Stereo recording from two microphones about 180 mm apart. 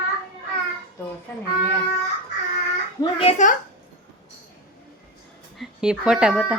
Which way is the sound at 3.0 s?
35° left (ahead or behind).